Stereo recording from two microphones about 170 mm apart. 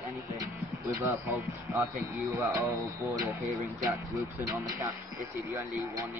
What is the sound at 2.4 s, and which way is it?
Speech, 20° right (ahead or behind).